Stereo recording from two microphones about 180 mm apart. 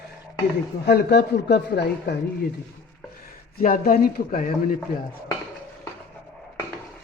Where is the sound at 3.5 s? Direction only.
50° left (ahead or behind).